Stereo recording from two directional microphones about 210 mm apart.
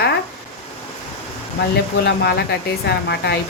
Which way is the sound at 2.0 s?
50° left (ahead or behind).